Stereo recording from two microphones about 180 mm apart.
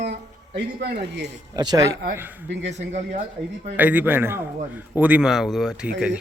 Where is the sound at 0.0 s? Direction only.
65° right (ahead or behind).